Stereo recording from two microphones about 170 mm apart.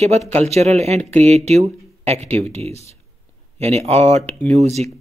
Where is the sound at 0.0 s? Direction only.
40° right (ahead or behind).